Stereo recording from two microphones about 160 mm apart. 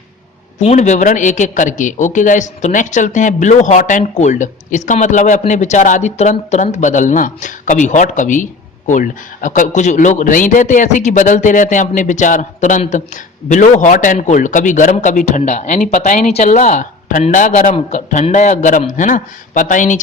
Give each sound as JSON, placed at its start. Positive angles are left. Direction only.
{"t": 0.6, "sound": "a man's voice", "side_deg": 45}